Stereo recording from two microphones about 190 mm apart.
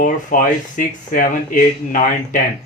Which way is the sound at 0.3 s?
45° left (ahead or behind).